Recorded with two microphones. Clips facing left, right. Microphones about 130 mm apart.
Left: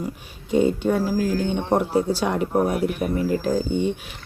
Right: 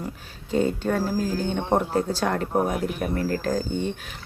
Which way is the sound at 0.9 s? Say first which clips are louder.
Left 3 dB; 10° left (ahead or behind).